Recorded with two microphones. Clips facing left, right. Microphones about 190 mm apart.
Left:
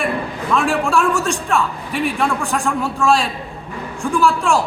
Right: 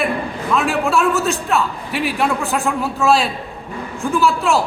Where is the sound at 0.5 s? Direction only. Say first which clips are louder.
Even; 5° right (ahead or behind).